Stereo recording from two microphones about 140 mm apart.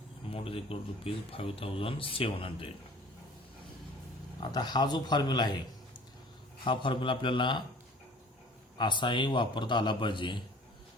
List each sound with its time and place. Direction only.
0.3 s speech: 40° left (ahead or behind)
4.4 s a man's voice: 30° left (ahead or behind)
8.8 s speech: 35° left (ahead or behind)